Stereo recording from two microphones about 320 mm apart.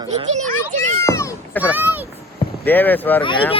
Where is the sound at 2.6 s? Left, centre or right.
Centre.